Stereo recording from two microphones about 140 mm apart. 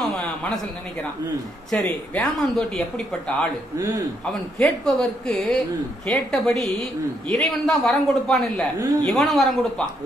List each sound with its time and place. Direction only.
0.0 s a sound: 5° left (ahead or behind)
2.1 s a man's voice: centre (ahead or behind)
3.7 s a man's voice: 25° right (ahead or behind)
4.3 s a man's voice: 5° left (ahead or behind)